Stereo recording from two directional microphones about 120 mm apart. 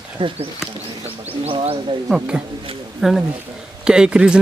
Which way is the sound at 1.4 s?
55° right (ahead or behind).